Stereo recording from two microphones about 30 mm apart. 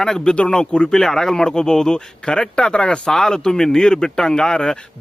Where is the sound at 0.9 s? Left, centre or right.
Centre.